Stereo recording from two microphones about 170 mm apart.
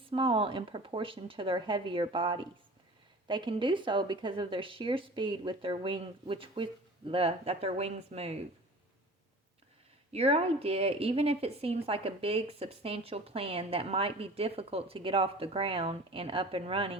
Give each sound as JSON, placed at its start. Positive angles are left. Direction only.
{"t": 0.1, "sound": "speech", "side_deg": -35}
{"t": 10.1, "sound": "speech", "side_deg": -35}